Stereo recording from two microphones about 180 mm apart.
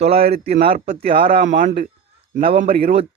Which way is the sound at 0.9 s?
35° right (ahead or behind).